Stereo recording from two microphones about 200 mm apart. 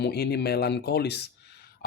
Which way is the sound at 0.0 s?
55° left (ahead or behind).